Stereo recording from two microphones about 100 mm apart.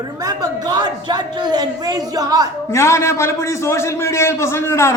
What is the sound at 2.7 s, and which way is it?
A man's voice, 25° left (ahead or behind).